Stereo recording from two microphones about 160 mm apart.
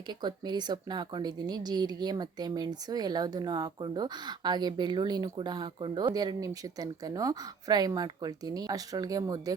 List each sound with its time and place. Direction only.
0.1 s speech: 25° right (ahead or behind)